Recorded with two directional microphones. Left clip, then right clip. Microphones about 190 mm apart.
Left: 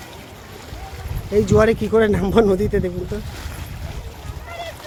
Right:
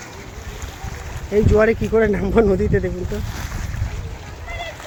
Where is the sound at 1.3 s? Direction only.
15° left (ahead or behind).